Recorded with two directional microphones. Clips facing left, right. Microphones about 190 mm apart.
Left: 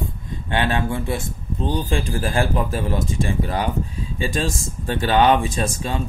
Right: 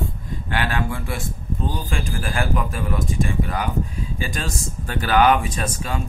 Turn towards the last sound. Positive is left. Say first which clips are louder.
# left 3 dB
turn(degrees=30)  # may be behind; listen again after turning